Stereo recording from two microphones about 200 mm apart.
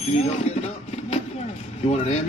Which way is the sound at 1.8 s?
35° left (ahead or behind).